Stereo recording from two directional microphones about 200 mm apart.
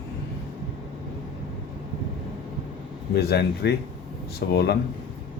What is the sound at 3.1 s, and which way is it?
Speech, 55° left (ahead or behind).